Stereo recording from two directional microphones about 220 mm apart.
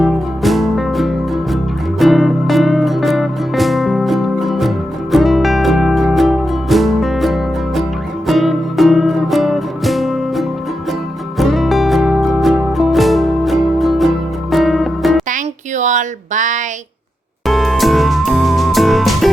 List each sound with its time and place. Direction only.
0.0 s music: centre (ahead or behind)
15.3 s a sound: 35° right (ahead or behind)
17.4 s music: centre (ahead or behind)